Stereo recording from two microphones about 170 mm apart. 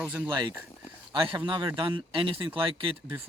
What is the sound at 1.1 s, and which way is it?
Speech, 30° right (ahead or behind).